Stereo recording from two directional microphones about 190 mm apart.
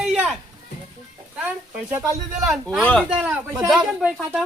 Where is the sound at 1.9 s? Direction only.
15° right (ahead or behind).